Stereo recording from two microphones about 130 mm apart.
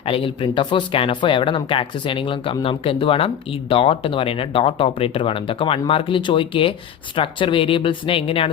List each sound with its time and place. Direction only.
0.0 s speech: 45° left (ahead or behind)